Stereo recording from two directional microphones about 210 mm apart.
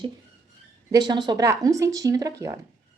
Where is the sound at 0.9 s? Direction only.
20° right (ahead or behind).